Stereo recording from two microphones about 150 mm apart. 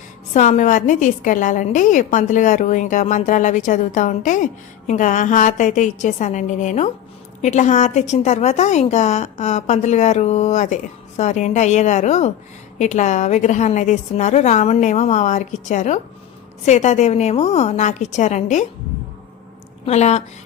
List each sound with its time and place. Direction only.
0.3 s a woman's voice: 55° left (ahead or behind)
19.8 s a woman's voice: 45° left (ahead or behind)